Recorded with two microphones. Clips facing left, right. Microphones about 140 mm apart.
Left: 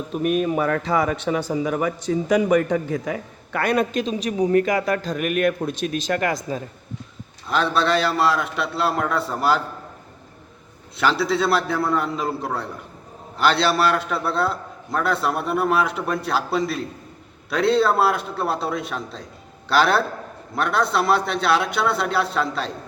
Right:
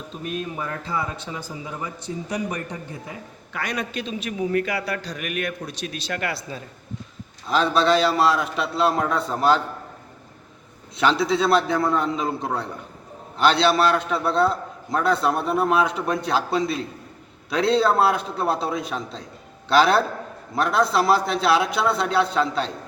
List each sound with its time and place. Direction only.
0.1 s a man's voice: 65° left (ahead or behind); by 3.2 s 90° left
3.5 s a man's voice: 55° left (ahead or behind)
7.5 s a man's voice: centre (ahead or behind)
10.9 s a man's voice: centre (ahead or behind)